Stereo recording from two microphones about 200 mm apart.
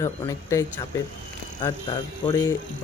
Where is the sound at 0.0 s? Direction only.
15° left (ahead or behind).